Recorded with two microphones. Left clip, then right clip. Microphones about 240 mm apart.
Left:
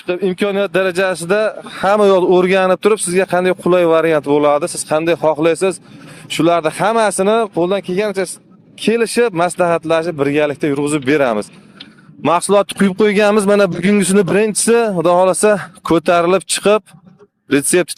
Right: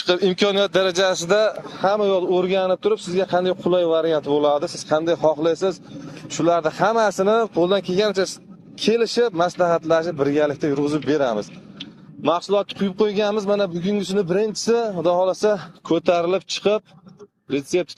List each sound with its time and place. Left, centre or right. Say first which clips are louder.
0.0 s a man's voice: left 1 dB; left